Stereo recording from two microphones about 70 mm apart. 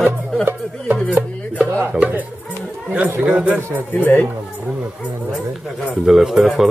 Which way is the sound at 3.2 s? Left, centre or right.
Centre.